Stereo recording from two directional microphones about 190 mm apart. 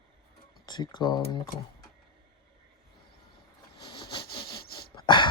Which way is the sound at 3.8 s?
20° left (ahead or behind).